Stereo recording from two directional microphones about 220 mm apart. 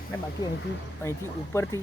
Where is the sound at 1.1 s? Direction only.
10° left (ahead or behind).